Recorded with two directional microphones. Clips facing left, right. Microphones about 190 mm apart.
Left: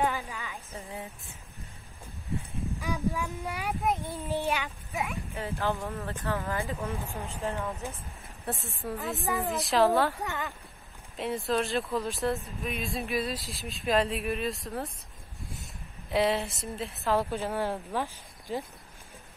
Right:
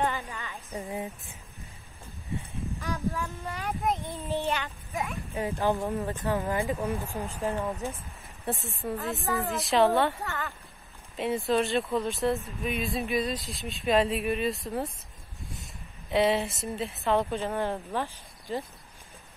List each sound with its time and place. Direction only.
0.0 s a sound: centre (ahead or behind)
0.7 s speech: 15° right (ahead or behind)
2.8 s speech: 15° left (ahead or behind)
5.3 s speech: 15° right (ahead or behind)
8.5 s speech: centre (ahead or behind)
9.2 s speech: 15° left (ahead or behind)
9.5 s speech: centre (ahead or behind)
10.2 s speech: 15° left (ahead or behind)
11.1 s speech: centre (ahead or behind)
15.5 s a sound: centre (ahead or behind)
16.6 s speech: centre (ahead or behind)